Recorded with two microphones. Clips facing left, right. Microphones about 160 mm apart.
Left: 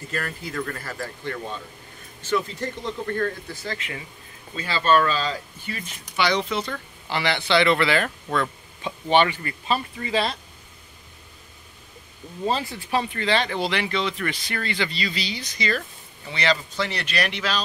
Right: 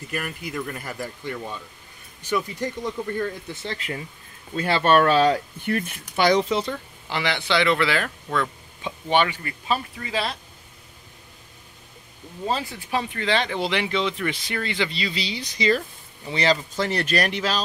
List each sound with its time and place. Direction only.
0.1 s speech: 15° right (ahead or behind)
3.5 s speech: 30° right (ahead or behind)
4.6 s speech: 60° right (ahead or behind); by 6.6 s 45° right (ahead or behind)
6.6 s speech: 15° right (ahead or behind)
13.1 s speech: 5° right (ahead or behind); by 17.6 s 40° right (ahead or behind)